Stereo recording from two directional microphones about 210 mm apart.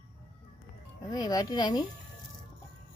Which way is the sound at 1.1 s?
15° left (ahead or behind).